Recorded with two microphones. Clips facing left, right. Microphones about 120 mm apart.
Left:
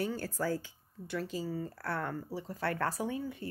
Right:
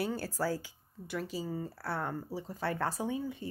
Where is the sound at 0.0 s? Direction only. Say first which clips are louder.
Right 1 dB; 10° right (ahead or behind).